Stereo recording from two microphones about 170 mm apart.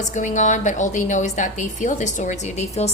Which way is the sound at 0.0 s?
45° left (ahead or behind).